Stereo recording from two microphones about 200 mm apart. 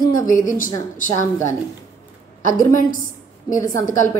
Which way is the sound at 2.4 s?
40° left (ahead or behind).